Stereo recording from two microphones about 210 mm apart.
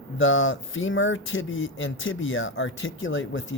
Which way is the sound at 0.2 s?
65° left (ahead or behind).